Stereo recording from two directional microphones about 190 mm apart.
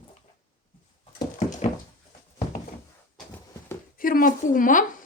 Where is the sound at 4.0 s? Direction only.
45° left (ahead or behind).